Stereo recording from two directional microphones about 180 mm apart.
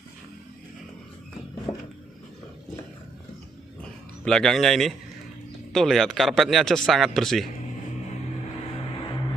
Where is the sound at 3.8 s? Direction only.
5° left (ahead or behind).